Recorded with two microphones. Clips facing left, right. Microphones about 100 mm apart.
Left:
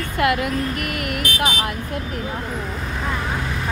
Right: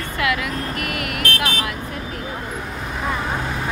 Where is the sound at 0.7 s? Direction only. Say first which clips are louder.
Left 1 dB; 50° right (ahead or behind).